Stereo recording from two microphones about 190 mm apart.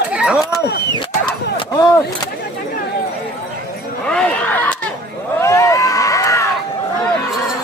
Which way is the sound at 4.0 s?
5° left (ahead or behind).